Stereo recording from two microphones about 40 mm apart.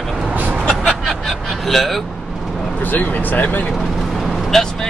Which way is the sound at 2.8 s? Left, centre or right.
Left.